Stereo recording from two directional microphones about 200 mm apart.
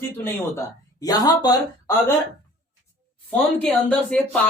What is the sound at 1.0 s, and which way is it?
Speech, 20° left (ahead or behind).